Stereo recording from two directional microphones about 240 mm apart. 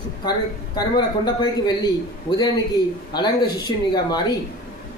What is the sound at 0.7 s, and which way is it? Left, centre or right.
A man's voice, centre.